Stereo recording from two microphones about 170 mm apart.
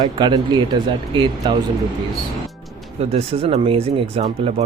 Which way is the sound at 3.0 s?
35° right (ahead or behind).